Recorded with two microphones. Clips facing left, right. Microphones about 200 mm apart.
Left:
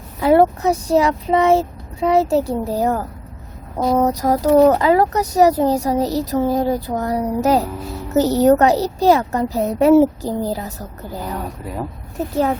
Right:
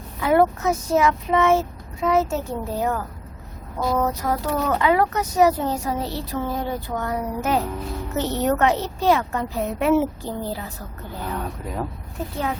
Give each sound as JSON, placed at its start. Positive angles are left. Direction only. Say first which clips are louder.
{"t": 0.2, "sound": "speech", "louder": "left 5 dB", "side_deg": 30}
{"t": 11.6, "sound": "speech", "louder": "left 2 dB", "side_deg": 5}